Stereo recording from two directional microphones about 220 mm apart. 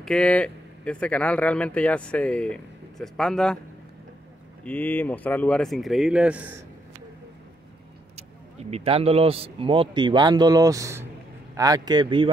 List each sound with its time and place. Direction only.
0.0 s speech: 5° left (ahead or behind)
4.6 s speech: 5° left (ahead or behind)
8.2 s speech: 30° right (ahead or behind)